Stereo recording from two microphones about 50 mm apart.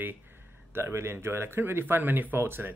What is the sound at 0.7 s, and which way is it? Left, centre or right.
Speech, right.